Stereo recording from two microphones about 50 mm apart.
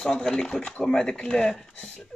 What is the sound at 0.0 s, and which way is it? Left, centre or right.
Speech, centre.